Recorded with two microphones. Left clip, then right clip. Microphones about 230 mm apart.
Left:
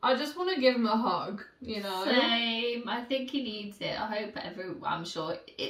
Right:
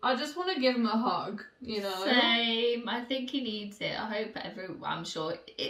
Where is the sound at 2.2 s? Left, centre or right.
Centre.